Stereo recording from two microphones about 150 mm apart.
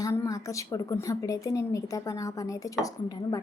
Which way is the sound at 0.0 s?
20° left (ahead or behind).